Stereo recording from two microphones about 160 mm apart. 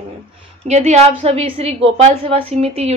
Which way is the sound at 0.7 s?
45° right (ahead or behind).